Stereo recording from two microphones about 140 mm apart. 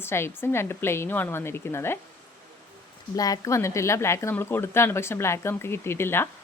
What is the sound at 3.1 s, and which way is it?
Speech, 25° left (ahead or behind).